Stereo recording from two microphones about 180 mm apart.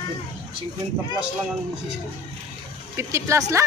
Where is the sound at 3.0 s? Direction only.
15° right (ahead or behind).